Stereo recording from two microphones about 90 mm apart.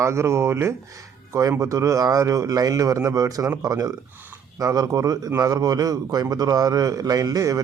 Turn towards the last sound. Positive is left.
turn(degrees=-40)  # may be behind; listen again after turning